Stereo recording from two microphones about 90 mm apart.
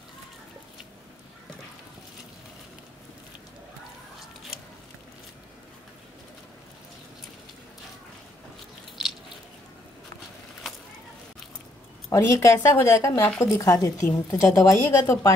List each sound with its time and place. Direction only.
12.1 s a woman's voice: 35° left (ahead or behind)